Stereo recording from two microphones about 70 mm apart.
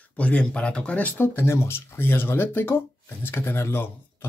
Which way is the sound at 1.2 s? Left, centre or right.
Left.